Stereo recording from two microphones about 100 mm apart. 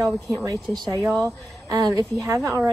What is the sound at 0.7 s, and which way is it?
Speech, 20° left (ahead or behind).